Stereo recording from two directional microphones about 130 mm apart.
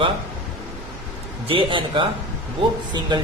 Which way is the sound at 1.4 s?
40° right (ahead or behind).